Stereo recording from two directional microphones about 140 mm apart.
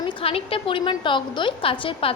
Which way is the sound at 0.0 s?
40° left (ahead or behind).